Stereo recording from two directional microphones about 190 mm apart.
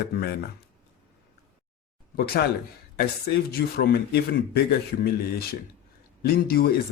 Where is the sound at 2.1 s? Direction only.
55° left (ahead or behind).